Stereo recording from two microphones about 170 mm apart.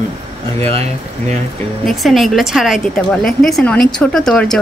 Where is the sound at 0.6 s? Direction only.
35° right (ahead or behind).